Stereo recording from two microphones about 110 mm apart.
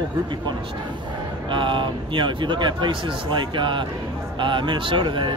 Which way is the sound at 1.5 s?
50° right (ahead or behind).